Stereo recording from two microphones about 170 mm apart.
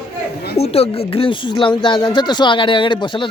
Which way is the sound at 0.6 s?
35° left (ahead or behind).